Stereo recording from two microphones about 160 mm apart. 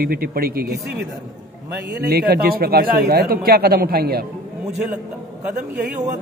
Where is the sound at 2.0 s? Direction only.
80° right.